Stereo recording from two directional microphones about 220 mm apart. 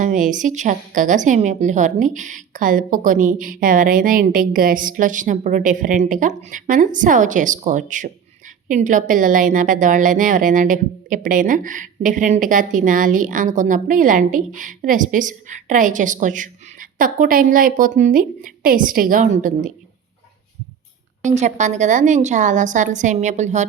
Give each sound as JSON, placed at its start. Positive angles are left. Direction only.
{"t": 0.0, "sound": "a woman's voice", "side_deg": -35}
{"t": 21.2, "sound": "a woman's voice", "side_deg": -30}